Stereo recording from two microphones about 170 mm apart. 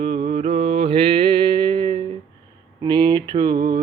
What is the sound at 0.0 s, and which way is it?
Mantra, 35° right (ahead or behind).